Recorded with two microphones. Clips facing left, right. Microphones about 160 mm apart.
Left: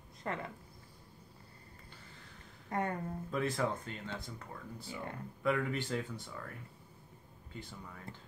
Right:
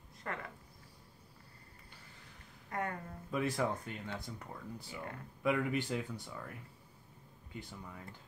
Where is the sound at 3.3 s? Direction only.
10° right (ahead or behind).